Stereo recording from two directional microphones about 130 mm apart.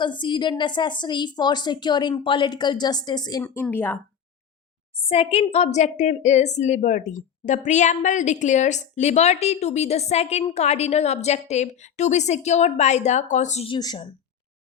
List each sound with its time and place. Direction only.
0.0 s a woman's voice: 35° left (ahead or behind)
3.4 s a woman's voice: 15° left (ahead or behind)
5.0 s a woman's voice: 50° left (ahead or behind)
13.7 s a woman's voice: 35° left (ahead or behind)